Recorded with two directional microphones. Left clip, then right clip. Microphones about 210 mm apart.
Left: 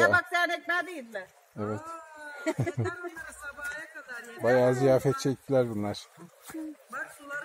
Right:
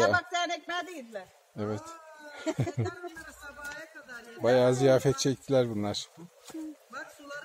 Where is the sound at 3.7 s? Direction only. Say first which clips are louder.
Left 4 dB; 15° left (ahead or behind).